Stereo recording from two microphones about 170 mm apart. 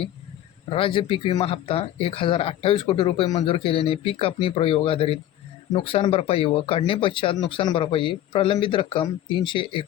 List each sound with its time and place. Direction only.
0.7 s speech: 30° left (ahead or behind)